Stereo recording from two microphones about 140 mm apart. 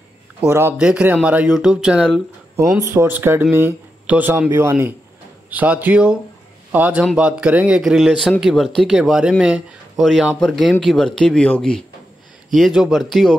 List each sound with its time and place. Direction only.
0.4 s speech: 15° right (ahead or behind)
2.8 s speech: 20° right (ahead or behind); by 13.4 s centre (ahead or behind)